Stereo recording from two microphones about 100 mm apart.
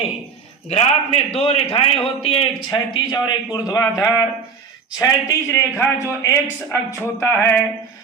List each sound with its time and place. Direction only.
0.7 s a man's voice: 90° left; by 2.6 s 65° left (ahead or behind)
2.6 s a man's voice: 50° left (ahead or behind); by 7.5 s 25° left (ahead or behind)